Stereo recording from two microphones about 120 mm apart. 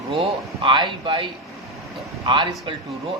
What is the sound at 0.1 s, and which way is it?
Speech, 45° right (ahead or behind).